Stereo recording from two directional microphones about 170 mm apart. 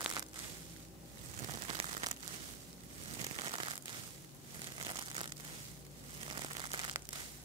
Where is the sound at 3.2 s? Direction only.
30° right (ahead or behind).